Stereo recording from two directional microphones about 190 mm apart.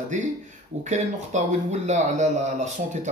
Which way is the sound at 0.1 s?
40° right (ahead or behind).